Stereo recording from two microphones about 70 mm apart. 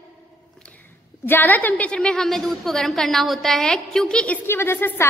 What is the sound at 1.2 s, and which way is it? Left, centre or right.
Speech, left.